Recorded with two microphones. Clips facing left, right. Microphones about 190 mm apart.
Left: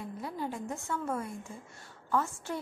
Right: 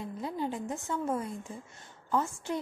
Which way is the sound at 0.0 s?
20° right (ahead or behind).